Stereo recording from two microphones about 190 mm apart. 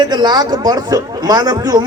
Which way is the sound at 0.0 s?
20° right (ahead or behind).